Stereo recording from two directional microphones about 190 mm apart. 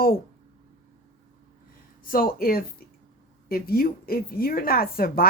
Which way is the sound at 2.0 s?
50° left (ahead or behind).